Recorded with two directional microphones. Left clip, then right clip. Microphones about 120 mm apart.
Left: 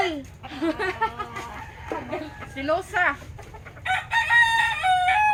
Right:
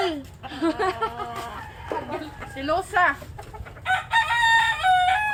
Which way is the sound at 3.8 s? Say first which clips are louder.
Right 1 dB; 10° right (ahead or behind).